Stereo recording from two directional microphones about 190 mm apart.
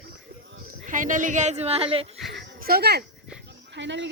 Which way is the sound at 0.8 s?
45° right (ahead or behind).